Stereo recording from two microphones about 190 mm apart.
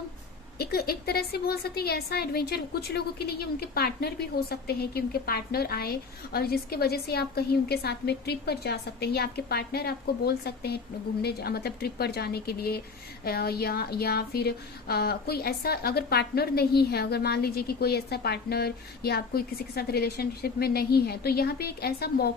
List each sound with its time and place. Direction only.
0.6 s a woman's voice: 55° left (ahead or behind)